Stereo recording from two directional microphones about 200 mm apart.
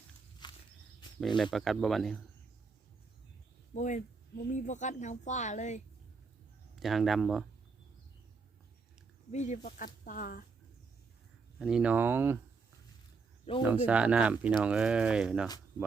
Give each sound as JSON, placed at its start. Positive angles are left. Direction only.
{"t": 0.4, "sound": "walk", "side_deg": 20}
{"t": 1.4, "sound": "speech", "side_deg": 0}
{"t": 3.8, "sound": "speech", "side_deg": 40}
{"t": 6.7, "sound": "speech", "side_deg": 0}
{"t": 9.3, "sound": "speech", "side_deg": 35}
{"t": 11.6, "sound": "speech", "side_deg": -5}
{"t": 13.6, "sound": "speech", "side_deg": -10}